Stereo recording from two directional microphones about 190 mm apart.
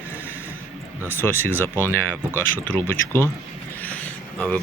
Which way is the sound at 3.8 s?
10° left (ahead or behind).